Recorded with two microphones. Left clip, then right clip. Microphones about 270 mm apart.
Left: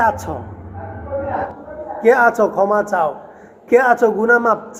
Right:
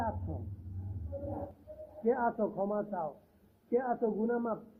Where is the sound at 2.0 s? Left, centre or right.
Centre.